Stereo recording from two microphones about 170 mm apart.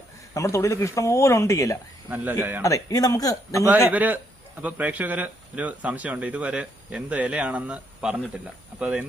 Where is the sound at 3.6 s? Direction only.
10° right (ahead or behind).